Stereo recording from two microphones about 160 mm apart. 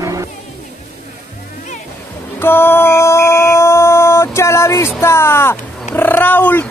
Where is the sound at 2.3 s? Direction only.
15° left (ahead or behind).